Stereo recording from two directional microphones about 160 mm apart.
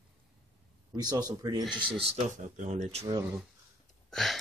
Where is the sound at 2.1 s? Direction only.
45° right (ahead or behind).